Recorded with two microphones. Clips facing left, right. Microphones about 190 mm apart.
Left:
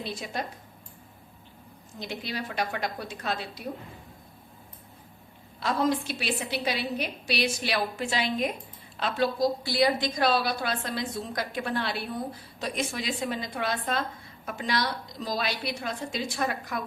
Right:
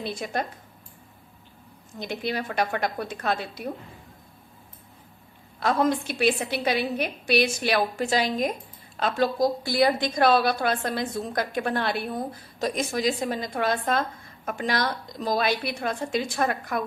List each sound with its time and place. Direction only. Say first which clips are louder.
0.0 s a woman's voice: right 4 dB; 55° right (ahead or behind)
2.0 s a woman's voice: right 5 dB; 55° right (ahead or behind)
5.5 s a woman's voice: right 3 dB; 50° right (ahead or behind)